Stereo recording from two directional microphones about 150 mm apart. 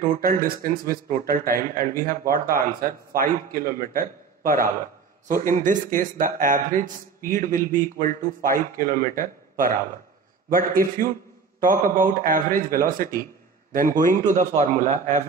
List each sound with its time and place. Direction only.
0.2 s speech: 70° right (ahead or behind); by 15.2 s 55° right (ahead or behind)